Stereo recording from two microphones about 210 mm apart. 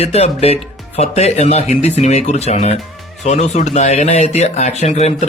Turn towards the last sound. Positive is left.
turn(degrees=30)  # may be behind; listen again after turning